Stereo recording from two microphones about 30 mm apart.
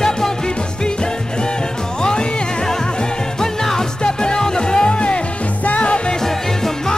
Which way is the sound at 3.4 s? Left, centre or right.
Centre.